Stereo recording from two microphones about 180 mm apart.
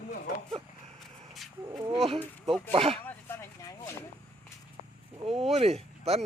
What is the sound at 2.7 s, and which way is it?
Speech, 30° right (ahead or behind).